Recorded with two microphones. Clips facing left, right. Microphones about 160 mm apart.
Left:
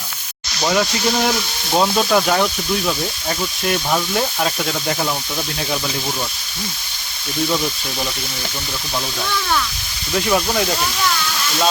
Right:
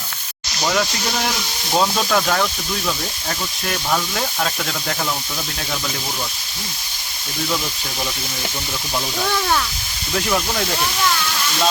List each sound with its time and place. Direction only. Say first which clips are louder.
0.6 s speech: left 3 dB; 5° left (ahead or behind)
10.2 s speech: left 3 dB; 5° left (ahead or behind)